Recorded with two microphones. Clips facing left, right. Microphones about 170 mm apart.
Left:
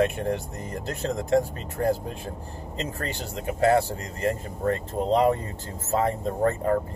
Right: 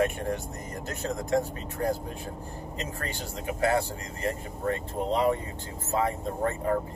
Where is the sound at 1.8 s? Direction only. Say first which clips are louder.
Left 4 dB; 40° left (ahead or behind).